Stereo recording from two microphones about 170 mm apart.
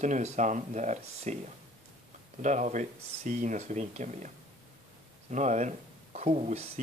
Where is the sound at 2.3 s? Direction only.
45° right (ahead or behind).